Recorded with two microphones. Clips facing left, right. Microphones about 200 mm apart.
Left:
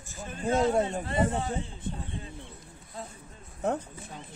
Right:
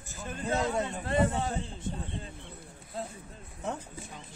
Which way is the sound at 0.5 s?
50° left (ahead or behind).